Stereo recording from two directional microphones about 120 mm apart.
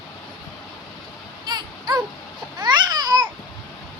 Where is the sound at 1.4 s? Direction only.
35° right (ahead or behind).